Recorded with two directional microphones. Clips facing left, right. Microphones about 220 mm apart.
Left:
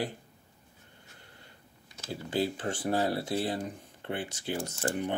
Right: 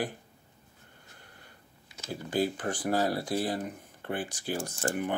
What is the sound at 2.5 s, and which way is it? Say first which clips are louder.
Speech: right 1 dB; 25° left (ahead or behind).